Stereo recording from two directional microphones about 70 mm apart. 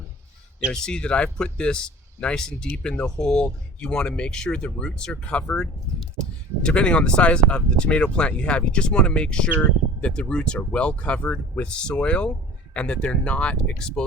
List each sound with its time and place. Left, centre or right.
0.7 s speech: centre